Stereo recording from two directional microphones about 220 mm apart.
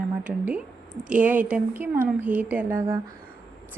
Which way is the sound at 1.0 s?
5° right (ahead or behind).